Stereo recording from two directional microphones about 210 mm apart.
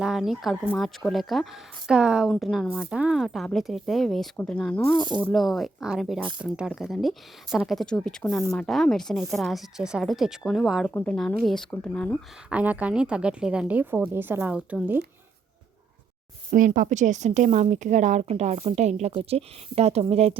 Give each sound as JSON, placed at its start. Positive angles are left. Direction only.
{"t": 0.0, "sound": "speech", "side_deg": 0}
{"t": 4.9, "sound": "speech", "side_deg": -20}
{"t": 5.2, "sound": "speech", "side_deg": 0}
{"t": 12.5, "sound": "speech", "side_deg": -5}
{"t": 16.5, "sound": "a woman's voice", "side_deg": -40}